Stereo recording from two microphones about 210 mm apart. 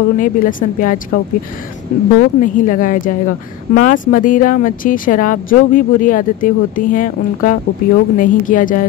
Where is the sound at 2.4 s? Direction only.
40° left (ahead or behind).